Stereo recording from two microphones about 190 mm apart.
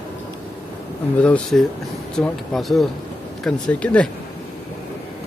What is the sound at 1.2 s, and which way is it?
Speech, 5° left (ahead or behind).